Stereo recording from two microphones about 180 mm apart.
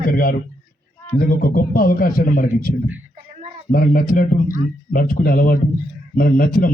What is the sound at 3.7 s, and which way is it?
A man's voice, 50° left (ahead or behind).